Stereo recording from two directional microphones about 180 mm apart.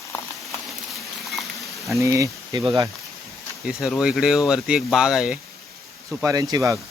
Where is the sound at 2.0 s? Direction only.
15° right (ahead or behind).